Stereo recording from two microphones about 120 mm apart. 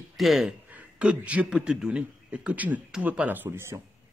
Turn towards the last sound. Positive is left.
turn(degrees=-15)  # may be behind; listen again after turning